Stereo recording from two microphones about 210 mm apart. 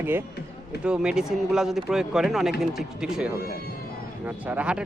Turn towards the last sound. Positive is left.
turn(degrees=-5)  # may be behind; listen again after turning